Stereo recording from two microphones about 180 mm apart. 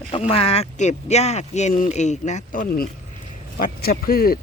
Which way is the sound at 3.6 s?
55° left (ahead or behind).